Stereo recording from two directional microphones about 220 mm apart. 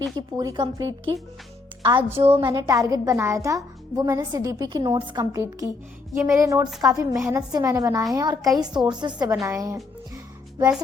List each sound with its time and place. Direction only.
0.2 s a child's voice: 15° right (ahead or behind)